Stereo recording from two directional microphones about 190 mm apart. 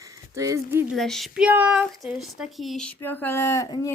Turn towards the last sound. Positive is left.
turn(degrees=15)  # may be behind; listen again after turning